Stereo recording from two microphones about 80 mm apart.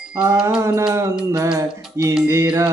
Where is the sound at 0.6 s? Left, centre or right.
Right.